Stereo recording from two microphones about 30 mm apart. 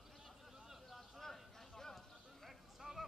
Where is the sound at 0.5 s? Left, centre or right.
Centre.